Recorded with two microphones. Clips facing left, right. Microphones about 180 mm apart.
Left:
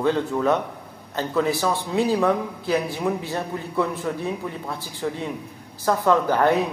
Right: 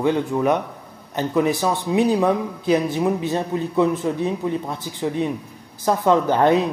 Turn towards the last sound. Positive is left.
turn(degrees=-20)  # may be behind; listen again after turning